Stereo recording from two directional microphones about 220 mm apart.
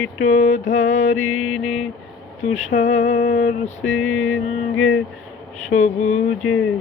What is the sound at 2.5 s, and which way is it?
Mantra, 35° left (ahead or behind).